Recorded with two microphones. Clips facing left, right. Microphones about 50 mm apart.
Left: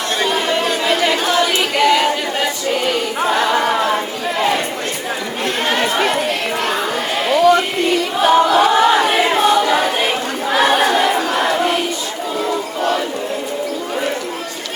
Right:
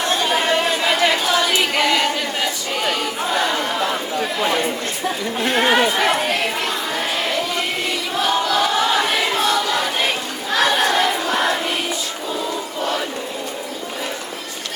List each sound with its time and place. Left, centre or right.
0.3 s chatter: centre
1.5 s choir: centre
5.5 s chatter: centre
8.2 s choir: left
10.0 s crowd: centre